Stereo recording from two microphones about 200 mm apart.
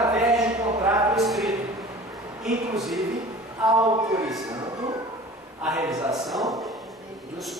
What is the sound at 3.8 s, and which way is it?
Speech, 15° right (ahead or behind).